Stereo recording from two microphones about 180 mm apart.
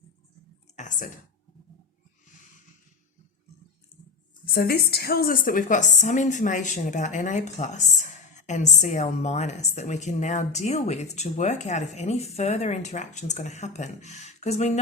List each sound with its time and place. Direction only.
0.8 s a woman's voice: 45° left (ahead or behind)
4.5 s a woman's voice: 60° left (ahead or behind); by 14.8 s 35° left (ahead or behind)